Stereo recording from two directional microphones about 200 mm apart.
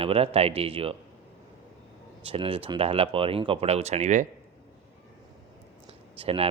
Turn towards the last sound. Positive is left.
turn(degrees=-30)  # may be behind; listen again after turning